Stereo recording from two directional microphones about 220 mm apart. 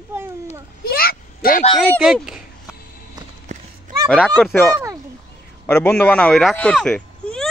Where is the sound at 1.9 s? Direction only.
Centre (ahead or behind).